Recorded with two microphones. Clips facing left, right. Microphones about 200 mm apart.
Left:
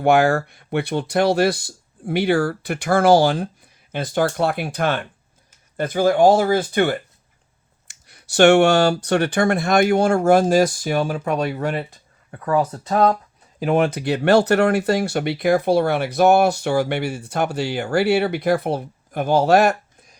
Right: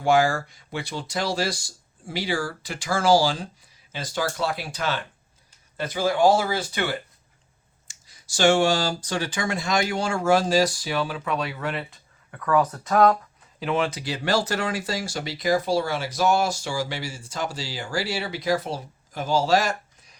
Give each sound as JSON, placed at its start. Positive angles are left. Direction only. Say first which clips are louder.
{"t": 0.0, "sound": "speech", "louder": "left 5 dB", "side_deg": 60}
{"t": 7.9, "sound": "speech", "louder": "left 5 dB", "side_deg": 65}
{"t": 13.6, "sound": "speech", "louder": "left 6 dB", "side_deg": 50}